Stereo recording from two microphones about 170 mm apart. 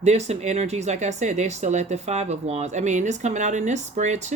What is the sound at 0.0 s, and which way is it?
Speech, 40° right (ahead or behind).